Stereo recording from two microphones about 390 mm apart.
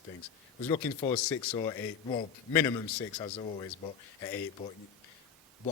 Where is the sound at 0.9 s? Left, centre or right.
Centre.